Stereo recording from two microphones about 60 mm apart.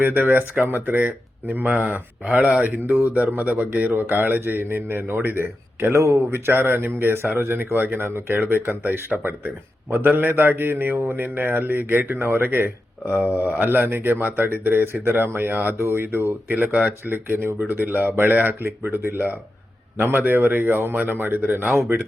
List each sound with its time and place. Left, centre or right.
0.0 s a man's voice: right
8.0 s a man's voice: right